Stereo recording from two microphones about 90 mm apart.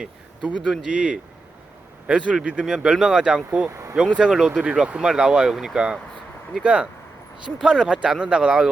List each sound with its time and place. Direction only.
0.0 s speech: 10° right (ahead or behind)
3.7 s speech: 35° right (ahead or behind)
3.9 s speech: 10° right (ahead or behind)